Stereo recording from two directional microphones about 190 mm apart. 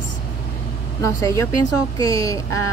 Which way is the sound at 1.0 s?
15° left (ahead or behind).